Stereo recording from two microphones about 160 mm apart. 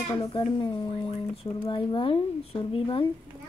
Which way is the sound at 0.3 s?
35° left (ahead or behind).